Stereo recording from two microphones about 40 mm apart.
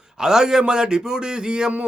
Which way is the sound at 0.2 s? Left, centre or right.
Centre.